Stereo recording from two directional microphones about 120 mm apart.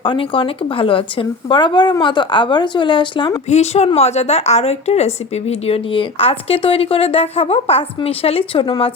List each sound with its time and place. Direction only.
0.0 s speech: 45° left (ahead or behind)
3.5 s a woman's voice: 65° left (ahead or behind); by 8.9 s 45° left (ahead or behind)